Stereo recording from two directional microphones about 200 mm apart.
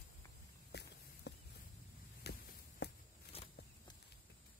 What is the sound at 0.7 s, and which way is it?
Walk, 55° left (ahead or behind).